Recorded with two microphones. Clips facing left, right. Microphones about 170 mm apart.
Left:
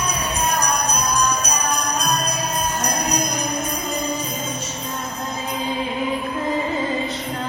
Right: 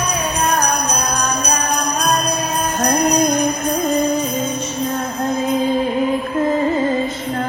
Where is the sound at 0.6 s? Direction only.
65° right (ahead or behind).